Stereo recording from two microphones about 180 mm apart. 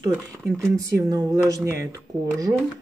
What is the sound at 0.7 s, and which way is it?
Speech, 20° right (ahead or behind).